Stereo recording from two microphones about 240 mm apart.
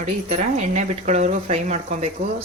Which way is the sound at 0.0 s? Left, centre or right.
Right.